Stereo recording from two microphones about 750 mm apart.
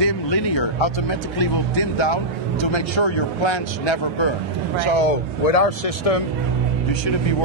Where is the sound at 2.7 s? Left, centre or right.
Left.